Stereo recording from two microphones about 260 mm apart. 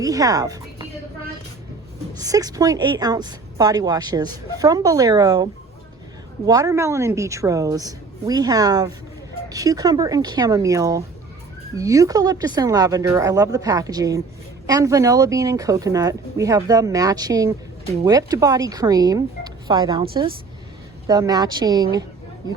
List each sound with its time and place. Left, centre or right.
0.0 s a woman's voice: centre
2.1 s a woman's voice: centre